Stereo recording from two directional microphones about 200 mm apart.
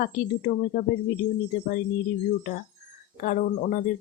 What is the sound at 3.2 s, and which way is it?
Speech, 40° left (ahead or behind).